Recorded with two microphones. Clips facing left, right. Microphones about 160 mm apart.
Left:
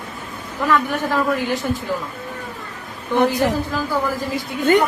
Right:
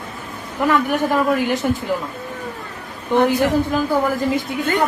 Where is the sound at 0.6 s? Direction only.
15° right (ahead or behind).